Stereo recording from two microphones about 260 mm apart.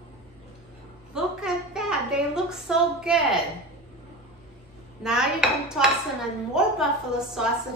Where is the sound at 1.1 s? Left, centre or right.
Centre.